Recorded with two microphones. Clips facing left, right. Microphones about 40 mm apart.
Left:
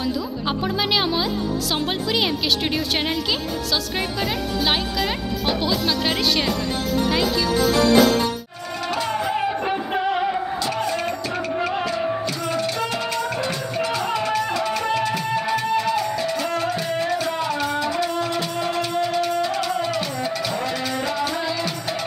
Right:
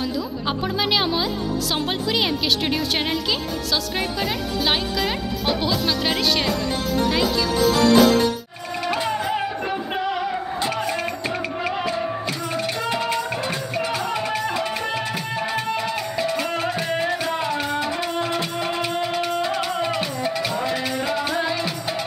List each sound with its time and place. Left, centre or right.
0.0 s a woman's voice: centre
8.8 s music: centre
9.6 s music: centre
10.8 s music: centre
12.3 s music: right